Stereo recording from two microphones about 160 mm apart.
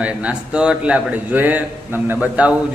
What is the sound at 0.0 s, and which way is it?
A man's voice, 10° right (ahead or behind).